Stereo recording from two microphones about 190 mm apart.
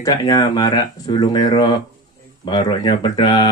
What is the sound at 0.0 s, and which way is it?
A man's voice, 20° left (ahead or behind).